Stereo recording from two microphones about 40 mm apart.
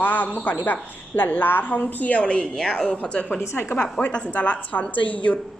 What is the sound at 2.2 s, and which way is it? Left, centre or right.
A woman's voice, left.